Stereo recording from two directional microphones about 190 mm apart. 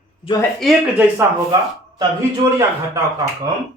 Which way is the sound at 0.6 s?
5° right (ahead or behind).